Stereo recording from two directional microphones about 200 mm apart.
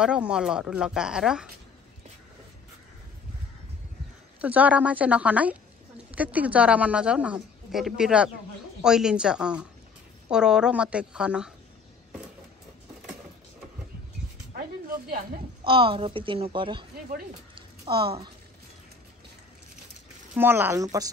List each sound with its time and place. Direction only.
0.0 s a woman's voice: 5° right (ahead or behind)
4.4 s a woman's voice: 5° right (ahead or behind)
15.6 s a woman's voice: 25° right (ahead or behind)
16.9 s speech: 45° right (ahead or behind)
17.6 s a sound: 25° right (ahead or behind)
20.3 s a woman's voice: 10° right (ahead or behind)